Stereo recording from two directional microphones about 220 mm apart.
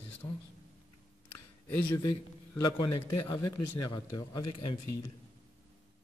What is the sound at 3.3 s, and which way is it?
A man's voice, 20° left (ahead or behind).